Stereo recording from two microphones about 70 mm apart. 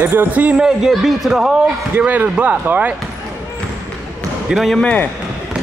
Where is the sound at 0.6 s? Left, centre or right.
Centre.